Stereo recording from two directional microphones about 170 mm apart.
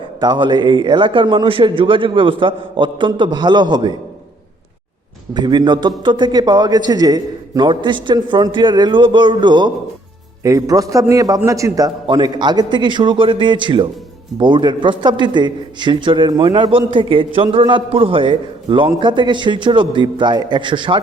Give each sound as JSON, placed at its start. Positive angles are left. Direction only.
{"t": 0.2, "sound": "a man's voice", "side_deg": -25}
{"t": 5.3, "sound": "a man's voice", "side_deg": -25}